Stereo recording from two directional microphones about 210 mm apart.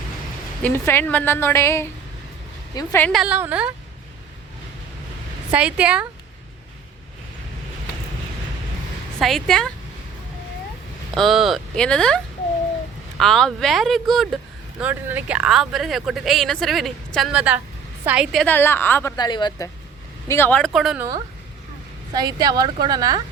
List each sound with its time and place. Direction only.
0.6 s a woman's voice: 10° left (ahead or behind)
3.1 s a woman's voice: 5° right (ahead or behind)
5.5 s speech: 5° right (ahead or behind)
9.2 s speech: centre (ahead or behind)
11.1 s a woman's voice: centre (ahead or behind)
22.1 s a woman's voice: 20° right (ahead or behind)